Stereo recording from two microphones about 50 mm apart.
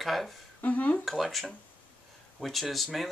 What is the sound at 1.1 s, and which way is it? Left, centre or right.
Speech, centre.